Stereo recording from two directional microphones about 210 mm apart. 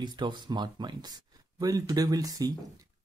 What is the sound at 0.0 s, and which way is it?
Speech, 20° right (ahead or behind).